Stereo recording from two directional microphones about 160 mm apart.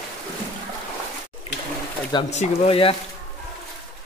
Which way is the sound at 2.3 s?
40° left (ahead or behind).